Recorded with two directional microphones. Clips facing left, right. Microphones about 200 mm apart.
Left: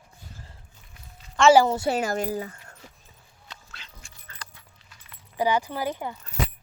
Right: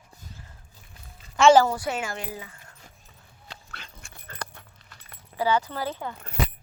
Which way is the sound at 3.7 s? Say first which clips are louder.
Right 3 dB; 55° right (ahead or behind).